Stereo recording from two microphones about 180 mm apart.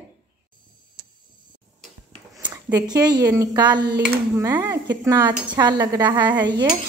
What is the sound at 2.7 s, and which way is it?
A woman's voice, 20° right (ahead or behind).